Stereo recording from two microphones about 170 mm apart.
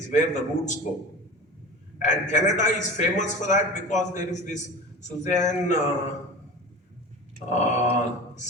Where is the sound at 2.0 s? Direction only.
45° left (ahead or behind).